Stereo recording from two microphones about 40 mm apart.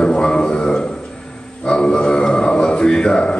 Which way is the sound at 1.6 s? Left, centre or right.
Left.